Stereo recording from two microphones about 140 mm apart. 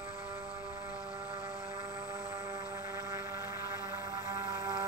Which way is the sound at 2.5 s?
20° right (ahead or behind).